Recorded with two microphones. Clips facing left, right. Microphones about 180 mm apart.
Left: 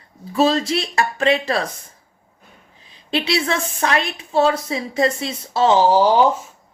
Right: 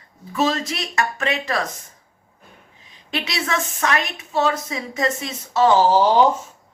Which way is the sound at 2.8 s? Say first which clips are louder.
Left 5 dB; 30° left (ahead or behind).